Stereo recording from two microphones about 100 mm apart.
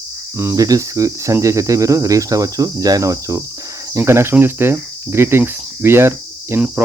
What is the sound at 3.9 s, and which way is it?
Cricket, 25° right (ahead or behind).